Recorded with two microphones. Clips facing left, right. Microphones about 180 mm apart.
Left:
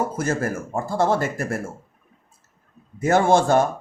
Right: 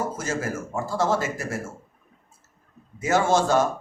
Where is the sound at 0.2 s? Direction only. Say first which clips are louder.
Left 4 dB; 55° left (ahead or behind).